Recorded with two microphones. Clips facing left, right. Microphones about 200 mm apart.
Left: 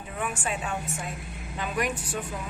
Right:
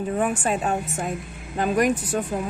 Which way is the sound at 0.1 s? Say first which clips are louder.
Right 7 dB; 40° right (ahead or behind).